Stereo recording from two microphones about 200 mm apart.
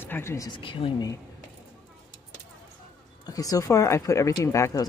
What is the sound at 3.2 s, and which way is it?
Speech, 20° left (ahead or behind).